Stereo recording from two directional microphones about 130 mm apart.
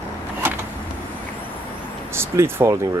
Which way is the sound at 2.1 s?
20° right (ahead or behind).